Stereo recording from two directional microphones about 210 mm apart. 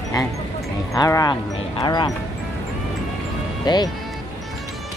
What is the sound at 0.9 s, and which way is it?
Speech, 15° left (ahead or behind).